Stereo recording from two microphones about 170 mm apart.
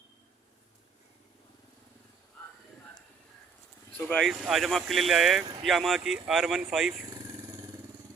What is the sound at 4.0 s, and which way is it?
Speech, 5° left (ahead or behind).